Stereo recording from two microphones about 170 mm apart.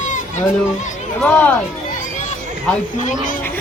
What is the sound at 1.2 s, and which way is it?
Speech, 10° left (ahead or behind).